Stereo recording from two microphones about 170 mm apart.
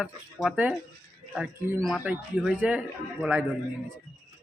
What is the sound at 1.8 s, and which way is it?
A man's voice, 5° right (ahead or behind).